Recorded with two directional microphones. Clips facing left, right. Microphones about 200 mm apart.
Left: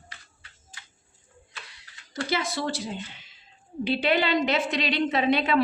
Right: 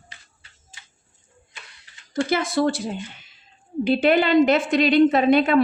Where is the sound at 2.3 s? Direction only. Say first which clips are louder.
Right 7 dB; 50° right (ahead or behind).